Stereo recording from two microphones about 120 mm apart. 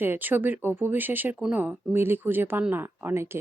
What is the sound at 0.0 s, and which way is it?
Speech, 15° right (ahead or behind).